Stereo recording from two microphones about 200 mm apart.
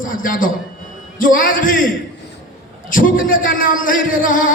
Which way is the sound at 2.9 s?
45° left (ahead or behind).